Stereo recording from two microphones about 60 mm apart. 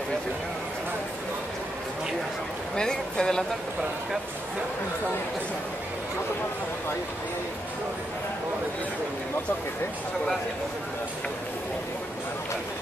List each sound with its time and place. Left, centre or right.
2.7 s speech: centre